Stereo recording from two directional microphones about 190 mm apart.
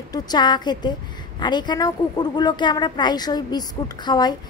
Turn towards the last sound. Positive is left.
turn(degrees=20)  # may be behind; listen again after turning